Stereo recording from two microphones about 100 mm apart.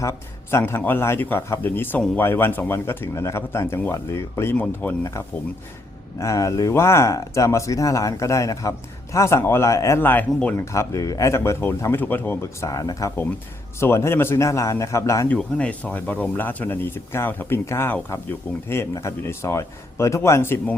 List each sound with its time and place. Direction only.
0.0 s speech: 30° left (ahead or behind)
4.5 s speech: 15° left (ahead or behind)
6.1 s speech: 30° left (ahead or behind)
10.7 s speech: 30° left (ahead or behind)
15.4 s speech: 10° left (ahead or behind); by 20.6 s 25° left (ahead or behind)